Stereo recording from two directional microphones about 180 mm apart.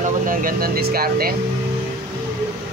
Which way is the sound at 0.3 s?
50° right (ahead or behind).